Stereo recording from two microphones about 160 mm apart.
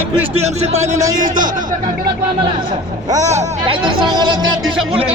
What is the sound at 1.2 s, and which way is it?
Speech, 55° right (ahead or behind).